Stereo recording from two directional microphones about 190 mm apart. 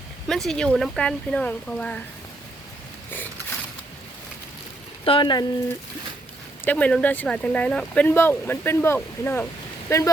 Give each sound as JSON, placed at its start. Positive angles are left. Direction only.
{"t": 0.3, "sound": "speech", "side_deg": 0}
{"t": 5.0, "sound": "speech", "side_deg": 25}
{"t": 6.7, "sound": "speech", "side_deg": 5}